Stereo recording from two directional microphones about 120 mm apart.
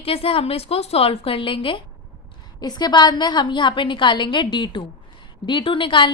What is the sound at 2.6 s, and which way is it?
A woman's voice, 35° left (ahead or behind).